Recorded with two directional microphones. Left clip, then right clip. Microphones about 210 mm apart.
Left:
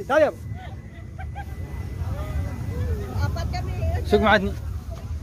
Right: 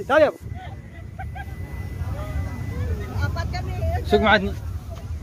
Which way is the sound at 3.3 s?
25° left (ahead or behind).